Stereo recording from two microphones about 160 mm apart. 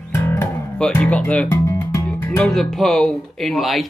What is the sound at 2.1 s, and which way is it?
Speech, 10° left (ahead or behind).